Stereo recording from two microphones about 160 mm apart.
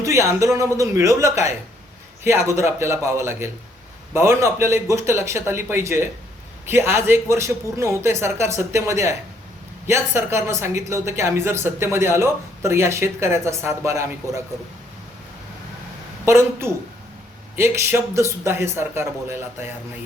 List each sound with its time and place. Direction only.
0.0 s speech: 20° right (ahead or behind)
16.2 s speech: 15° right (ahead or behind)